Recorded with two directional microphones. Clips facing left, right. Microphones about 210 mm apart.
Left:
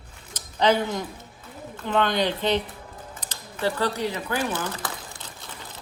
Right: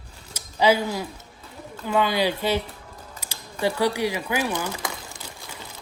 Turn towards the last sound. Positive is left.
turn(degrees=-10)  # may be behind; listen again after turning